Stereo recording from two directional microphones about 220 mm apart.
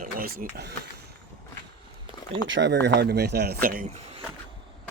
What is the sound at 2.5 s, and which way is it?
Speech, 55° right (ahead or behind).